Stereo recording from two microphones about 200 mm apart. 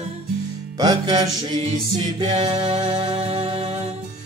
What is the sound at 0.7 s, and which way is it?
Music, 20° right (ahead or behind).